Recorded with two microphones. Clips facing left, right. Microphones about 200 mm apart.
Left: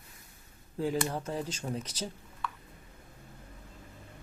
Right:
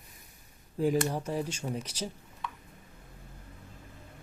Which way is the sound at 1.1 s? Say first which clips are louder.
Right 2 dB; 10° right (ahead or behind).